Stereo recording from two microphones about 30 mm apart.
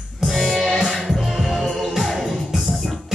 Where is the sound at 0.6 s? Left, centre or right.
Centre.